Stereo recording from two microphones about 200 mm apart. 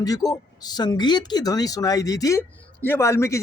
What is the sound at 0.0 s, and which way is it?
Speech, 20° left (ahead or behind).